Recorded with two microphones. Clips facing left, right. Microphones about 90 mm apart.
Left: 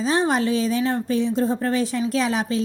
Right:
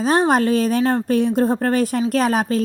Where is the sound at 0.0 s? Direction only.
50° right (ahead or behind).